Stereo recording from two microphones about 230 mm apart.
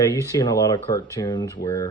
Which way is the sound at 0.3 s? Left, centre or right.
Centre.